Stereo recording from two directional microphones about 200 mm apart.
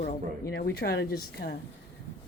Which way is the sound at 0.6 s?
50° left (ahead or behind).